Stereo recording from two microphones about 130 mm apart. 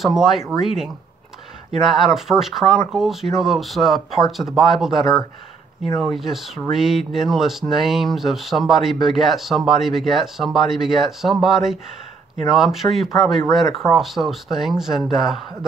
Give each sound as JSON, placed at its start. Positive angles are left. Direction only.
{"t": 0.0, "sound": "speech", "side_deg": 0}